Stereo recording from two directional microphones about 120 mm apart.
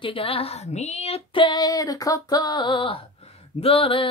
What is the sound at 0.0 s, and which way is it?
Female singing, 50° left (ahead or behind).